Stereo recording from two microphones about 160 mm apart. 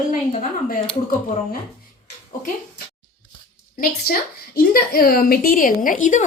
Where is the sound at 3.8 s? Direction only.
70° left (ahead or behind).